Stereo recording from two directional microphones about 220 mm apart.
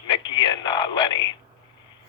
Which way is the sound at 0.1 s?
20° left (ahead or behind).